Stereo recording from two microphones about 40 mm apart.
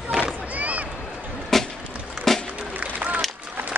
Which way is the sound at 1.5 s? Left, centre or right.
Centre.